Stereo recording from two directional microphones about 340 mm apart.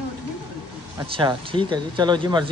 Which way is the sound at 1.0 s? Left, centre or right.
Centre.